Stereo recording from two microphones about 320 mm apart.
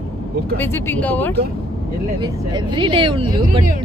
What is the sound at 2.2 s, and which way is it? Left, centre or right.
Speech, centre.